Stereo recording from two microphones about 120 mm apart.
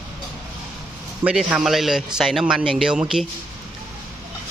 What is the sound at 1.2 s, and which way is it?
A man's voice, 10° right (ahead or behind).